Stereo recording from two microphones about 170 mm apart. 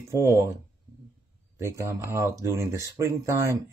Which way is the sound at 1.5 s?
20° right (ahead or behind).